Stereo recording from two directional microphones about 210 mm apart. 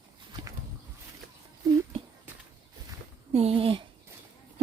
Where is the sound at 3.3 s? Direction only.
30° right (ahead or behind).